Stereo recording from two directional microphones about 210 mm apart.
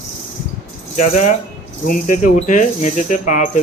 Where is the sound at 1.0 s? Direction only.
35° left (ahead or behind).